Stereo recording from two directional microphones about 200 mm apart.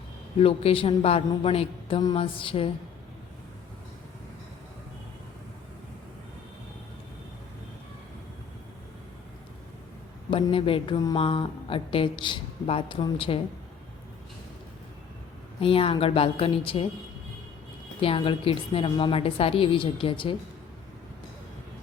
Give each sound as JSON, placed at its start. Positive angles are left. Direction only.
{"t": 0.3, "sound": "speech", "side_deg": 30}
{"t": 10.2, "sound": "speech", "side_deg": 25}
{"t": 15.6, "sound": "speech", "side_deg": 30}
{"t": 18.0, "sound": "speech", "side_deg": 25}